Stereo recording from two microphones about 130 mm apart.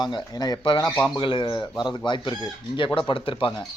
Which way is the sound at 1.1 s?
40° left (ahead or behind).